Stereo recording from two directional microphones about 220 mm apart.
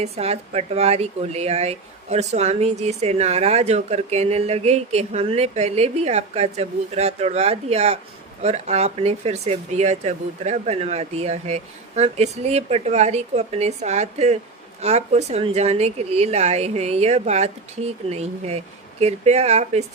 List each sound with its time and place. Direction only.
0.0 s speech: 30° right (ahead or behind)